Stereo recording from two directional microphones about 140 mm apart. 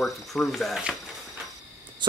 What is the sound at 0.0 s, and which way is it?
Speech, centre (ahead or behind).